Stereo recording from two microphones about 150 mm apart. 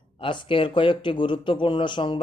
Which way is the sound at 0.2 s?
35° left (ahead or behind).